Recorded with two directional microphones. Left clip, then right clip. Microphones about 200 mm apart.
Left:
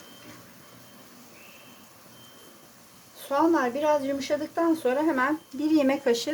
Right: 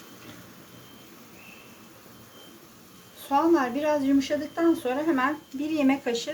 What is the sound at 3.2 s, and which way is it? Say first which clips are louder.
Speech: right 1 dB; 40° left (ahead or behind).